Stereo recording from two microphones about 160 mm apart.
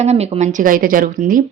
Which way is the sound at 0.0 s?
40° right (ahead or behind).